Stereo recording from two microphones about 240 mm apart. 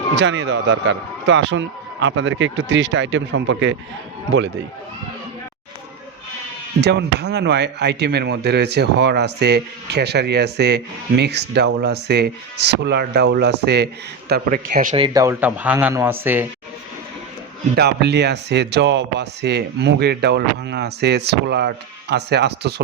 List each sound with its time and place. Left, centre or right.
0.2 s speech: right
6.8 s a man's voice: right; by 16.5 s centre
17.7 s speech: right